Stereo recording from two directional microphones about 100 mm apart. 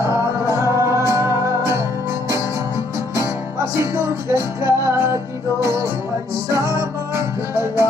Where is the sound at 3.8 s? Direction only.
30° right (ahead or behind).